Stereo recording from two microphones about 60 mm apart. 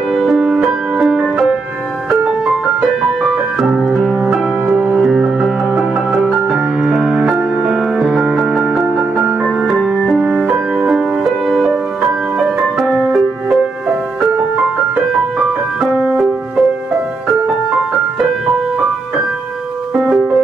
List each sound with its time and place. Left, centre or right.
0.1 s music: centre
3.5 s piano: centre
4.7 s music: right
5.0 s music: centre
10.1 s music: centre
15.8 s music: centre
19.9 s music: centre